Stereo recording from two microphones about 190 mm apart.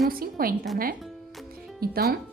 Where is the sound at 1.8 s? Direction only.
50° right (ahead or behind).